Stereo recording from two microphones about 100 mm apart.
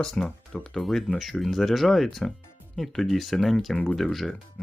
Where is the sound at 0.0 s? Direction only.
5° left (ahead or behind).